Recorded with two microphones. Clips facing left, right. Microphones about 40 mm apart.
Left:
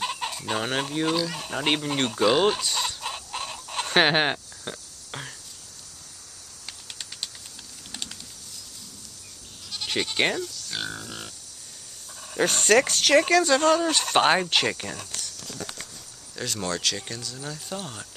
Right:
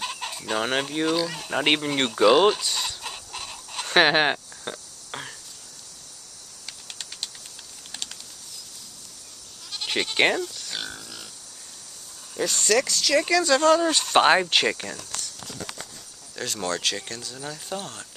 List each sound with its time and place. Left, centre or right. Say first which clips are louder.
0.0 s chicken: left 2 dB; centre
0.7 s speech: right 1 dB; centre
1.5 s speech: right 4 dB; centre
2.0 s speech: right 4 dB; centre
2.6 s chicken: left 1 dB; centre
3.8 s a sound: right 2 dB; centre
9.7 s speech: right 1 dB; centre
11.0 s pig: left 4 dB; left
12.4 s speech: left 3 dB; left
13.5 s speech: right 2 dB; centre
16.3 s speech: right 1 dB; centre